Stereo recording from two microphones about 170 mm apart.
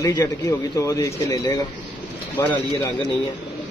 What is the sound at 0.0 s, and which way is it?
Speech, 20° left (ahead or behind).